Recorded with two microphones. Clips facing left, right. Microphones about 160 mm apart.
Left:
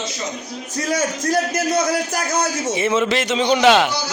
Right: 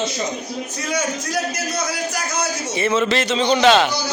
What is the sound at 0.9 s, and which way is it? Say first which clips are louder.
A man's voice: left 4 dB; 50° left (ahead or behind).